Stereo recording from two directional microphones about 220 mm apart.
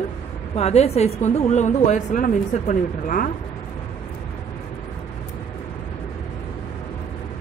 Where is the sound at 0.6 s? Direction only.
30° left (ahead or behind).